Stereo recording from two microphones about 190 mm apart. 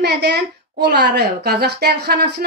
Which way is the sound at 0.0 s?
60° right (ahead or behind).